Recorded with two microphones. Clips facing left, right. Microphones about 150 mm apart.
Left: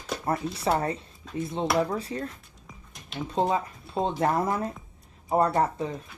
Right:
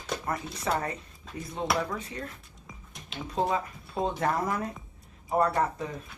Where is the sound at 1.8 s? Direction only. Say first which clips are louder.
Left 6 dB; 35° left (ahead or behind).